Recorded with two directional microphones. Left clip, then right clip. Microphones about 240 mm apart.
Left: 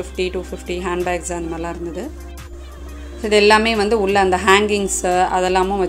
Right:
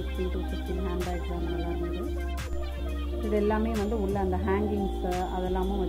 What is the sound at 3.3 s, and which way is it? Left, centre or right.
A woman's voice, left.